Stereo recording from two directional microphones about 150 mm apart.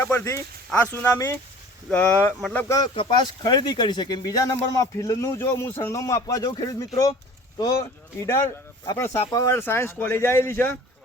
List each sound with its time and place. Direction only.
0.0 s speech: 15° left (ahead or behind)
2.7 s speech: 30° left (ahead or behind)